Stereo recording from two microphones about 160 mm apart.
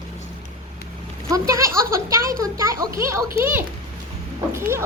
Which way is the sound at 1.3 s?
20° right (ahead or behind).